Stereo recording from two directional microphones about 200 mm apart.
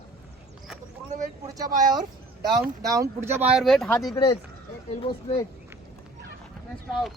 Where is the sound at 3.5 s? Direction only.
Centre (ahead or behind).